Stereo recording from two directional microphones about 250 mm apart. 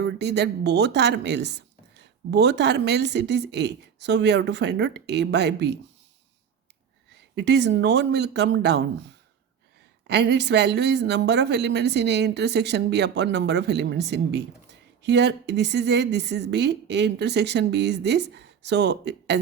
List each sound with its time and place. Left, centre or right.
0.0 s a woman's voice: right
7.1 s a woman's voice: right
10.1 s a woman's voice: right